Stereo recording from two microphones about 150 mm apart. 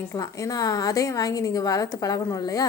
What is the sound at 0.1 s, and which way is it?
A woman's voice, 20° left (ahead or behind).